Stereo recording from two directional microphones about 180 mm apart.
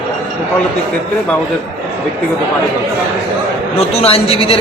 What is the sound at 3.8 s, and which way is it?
Speech, 35° left (ahead or behind).